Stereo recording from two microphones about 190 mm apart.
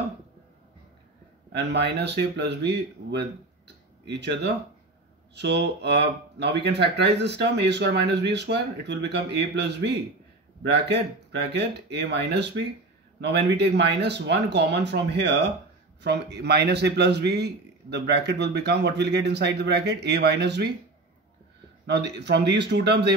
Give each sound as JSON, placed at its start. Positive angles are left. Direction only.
{"t": 1.5, "sound": "a man's voice", "side_deg": -65}
{"t": 21.8, "sound": "a man's voice", "side_deg": -65}